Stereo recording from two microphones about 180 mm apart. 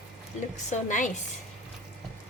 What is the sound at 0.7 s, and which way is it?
Speech, 45° left (ahead or behind).